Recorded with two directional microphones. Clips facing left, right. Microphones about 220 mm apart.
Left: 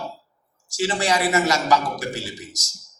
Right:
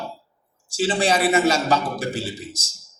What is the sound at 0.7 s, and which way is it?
A man's voice, 30° right (ahead or behind).